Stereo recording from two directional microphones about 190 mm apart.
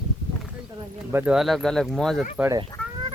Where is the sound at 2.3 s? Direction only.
10° right (ahead or behind).